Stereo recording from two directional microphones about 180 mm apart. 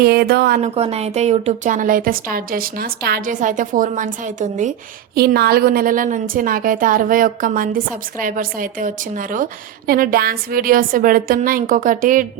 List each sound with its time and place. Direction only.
0.0 s a woman's voice: 60° right (ahead or behind)
0.6 s a woman's voice: 35° right (ahead or behind)
5.1 s a woman's voice: 60° right (ahead or behind)